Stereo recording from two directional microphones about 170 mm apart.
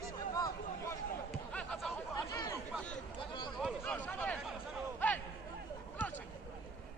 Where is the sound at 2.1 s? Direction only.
20° left (ahead or behind).